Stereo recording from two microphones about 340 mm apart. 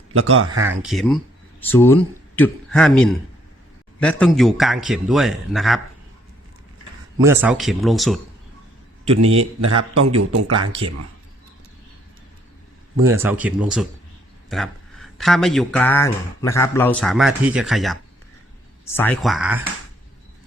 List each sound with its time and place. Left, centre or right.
0.1 s speech: right
0.8 s speech: centre
7.2 s speech: centre
9.0 s a man's voice: centre
9.6 s a man's voice: right
13.1 s speech: centre
18.9 s speech: centre